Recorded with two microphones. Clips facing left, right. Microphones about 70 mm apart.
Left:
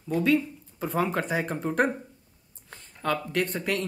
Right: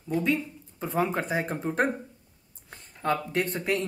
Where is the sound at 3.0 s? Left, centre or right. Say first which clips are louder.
Right 1 dB; right.